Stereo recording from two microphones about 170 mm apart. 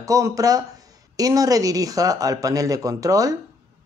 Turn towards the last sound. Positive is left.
turn(degrees=-20)  # may be behind; listen again after turning